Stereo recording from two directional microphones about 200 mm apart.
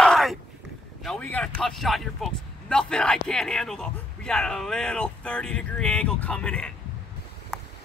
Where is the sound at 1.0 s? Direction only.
5° left (ahead or behind).